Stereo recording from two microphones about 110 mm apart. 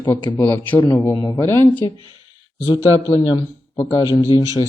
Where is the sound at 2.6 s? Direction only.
45° left (ahead or behind).